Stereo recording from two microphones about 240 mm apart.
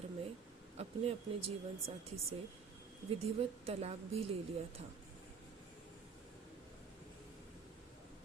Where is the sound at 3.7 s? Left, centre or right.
Right.